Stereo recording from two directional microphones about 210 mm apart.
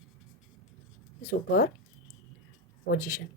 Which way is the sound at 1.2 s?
45° left (ahead or behind).